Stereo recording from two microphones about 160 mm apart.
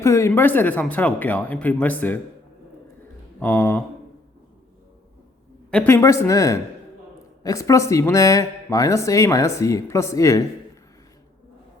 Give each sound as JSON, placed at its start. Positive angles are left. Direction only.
{"t": 0.0, "sound": "speech", "side_deg": 15}
{"t": 3.4, "sound": "speech", "side_deg": 10}
{"t": 5.7, "sound": "speech", "side_deg": 15}